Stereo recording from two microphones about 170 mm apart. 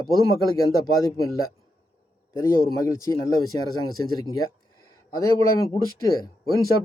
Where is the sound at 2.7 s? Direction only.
20° left (ahead or behind).